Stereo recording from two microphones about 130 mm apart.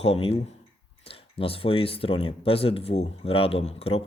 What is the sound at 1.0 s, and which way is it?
Speech, 45° left (ahead or behind).